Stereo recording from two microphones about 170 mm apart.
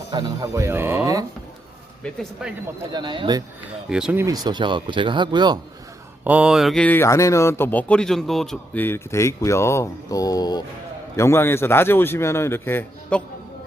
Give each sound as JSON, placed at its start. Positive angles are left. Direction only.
{"t": 0.1, "sound": "speech", "side_deg": -20}
{"t": 2.4, "sound": "speech", "side_deg": -5}
{"t": 2.9, "sound": "speech", "side_deg": -25}
{"t": 3.8, "sound": "speech", "side_deg": -5}
{"t": 4.4, "sound": "speech", "side_deg": -25}
{"t": 6.2, "sound": "speech", "side_deg": -5}